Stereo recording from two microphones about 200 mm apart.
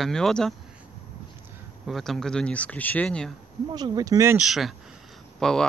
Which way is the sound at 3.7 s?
20° right (ahead or behind).